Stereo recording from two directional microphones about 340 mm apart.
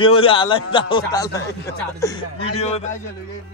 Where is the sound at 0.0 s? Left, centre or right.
Centre.